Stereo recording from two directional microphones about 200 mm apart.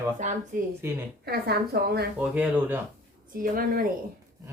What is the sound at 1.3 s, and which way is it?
Speech, 55° right (ahead or behind).